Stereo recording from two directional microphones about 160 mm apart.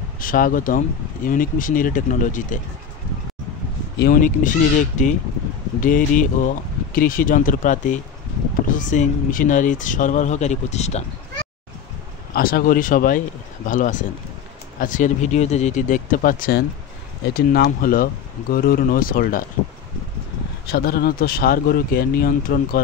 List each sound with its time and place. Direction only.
0.2 s speech: 60° left (ahead or behind)
4.0 s speech: 55° left (ahead or behind)
12.4 s speech: 65° left (ahead or behind)
20.6 s speech: 80° left